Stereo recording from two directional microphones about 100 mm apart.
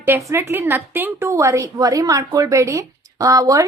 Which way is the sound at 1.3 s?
30° right (ahead or behind).